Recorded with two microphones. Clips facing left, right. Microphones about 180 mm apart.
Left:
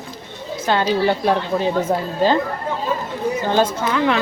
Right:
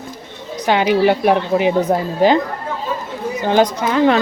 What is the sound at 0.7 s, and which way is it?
A woman's voice, 15° right (ahead or behind).